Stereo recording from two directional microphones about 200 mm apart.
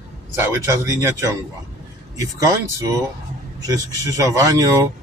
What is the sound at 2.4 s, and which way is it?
Speech, 15° right (ahead or behind).